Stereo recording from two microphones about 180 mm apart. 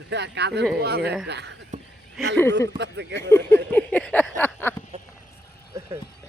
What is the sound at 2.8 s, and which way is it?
Speech, 75° right (ahead or behind).